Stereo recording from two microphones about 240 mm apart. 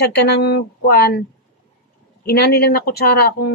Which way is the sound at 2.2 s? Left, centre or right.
Left.